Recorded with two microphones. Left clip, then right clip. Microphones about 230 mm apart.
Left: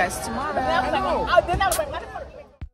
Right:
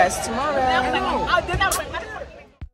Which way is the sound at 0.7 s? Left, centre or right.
Left.